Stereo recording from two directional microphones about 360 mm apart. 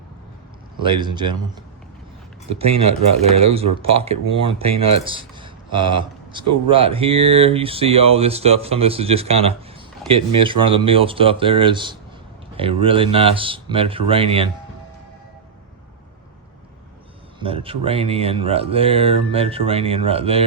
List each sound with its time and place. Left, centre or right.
0.8 s speech: centre
2.5 s speech: centre
17.4 s speech: centre